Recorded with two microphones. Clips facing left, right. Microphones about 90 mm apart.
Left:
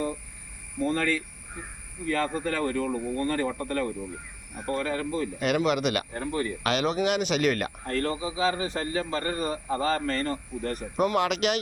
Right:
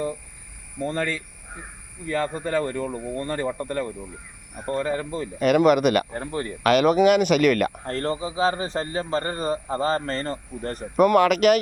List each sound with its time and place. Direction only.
0.9 s speech: 20° right (ahead or behind)
5.4 s speech: 50° right (ahead or behind)
6.1 s speech: 30° right (ahead or behind)
6.6 s speech: 50° right (ahead or behind)
7.9 s a man's voice: 35° right (ahead or behind)
10.9 s speech: 55° right (ahead or behind)